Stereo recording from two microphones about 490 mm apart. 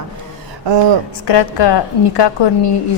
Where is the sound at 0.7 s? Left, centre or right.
Right.